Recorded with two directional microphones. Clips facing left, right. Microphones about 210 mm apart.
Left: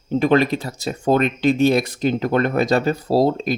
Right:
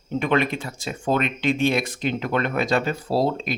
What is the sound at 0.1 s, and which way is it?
Speech, 35° left (ahead or behind).